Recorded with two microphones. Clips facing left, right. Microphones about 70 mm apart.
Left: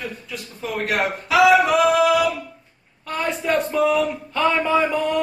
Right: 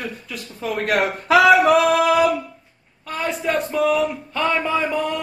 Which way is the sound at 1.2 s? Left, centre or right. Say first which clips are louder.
Right 2 dB; right.